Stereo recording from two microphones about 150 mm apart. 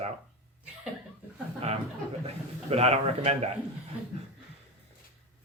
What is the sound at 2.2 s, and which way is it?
Speech, 45° right (ahead or behind).